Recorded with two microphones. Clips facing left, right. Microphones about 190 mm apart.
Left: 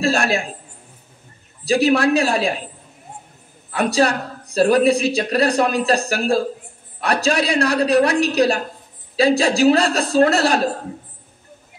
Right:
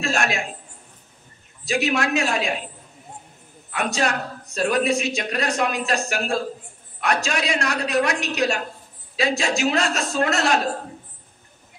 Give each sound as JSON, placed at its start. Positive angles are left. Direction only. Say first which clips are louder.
{"t": 0.0, "sound": "speech", "louder": "left 5 dB", "side_deg": 35}
{"t": 1.6, "sound": "speech", "louder": "left 7 dB", "side_deg": 35}
{"t": 3.7, "sound": "speech", "louder": "left 6 dB", "side_deg": 35}